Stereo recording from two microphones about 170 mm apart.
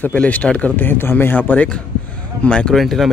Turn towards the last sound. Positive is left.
turn(degrees=0)  # may be behind; listen again after turning